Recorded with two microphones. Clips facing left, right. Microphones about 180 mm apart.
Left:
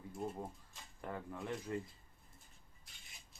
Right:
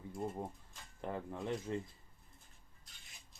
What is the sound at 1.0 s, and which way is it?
Speech, 20° right (ahead or behind).